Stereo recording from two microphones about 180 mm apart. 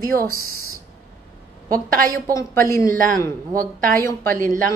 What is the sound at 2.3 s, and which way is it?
Speech, 15° left (ahead or behind).